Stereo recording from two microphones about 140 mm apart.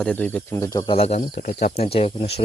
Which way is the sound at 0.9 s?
45° left (ahead or behind).